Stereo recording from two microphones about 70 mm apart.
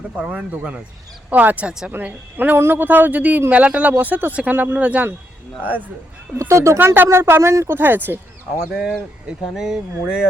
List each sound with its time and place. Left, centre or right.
0.2 s speech: centre
6.5 s speech: right
6.7 s speech: right
7.8 s speech: right
8.7 s speech: centre
9.6 s a sound: centre